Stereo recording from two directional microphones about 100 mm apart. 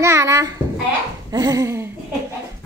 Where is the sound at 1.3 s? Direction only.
35° right (ahead or behind).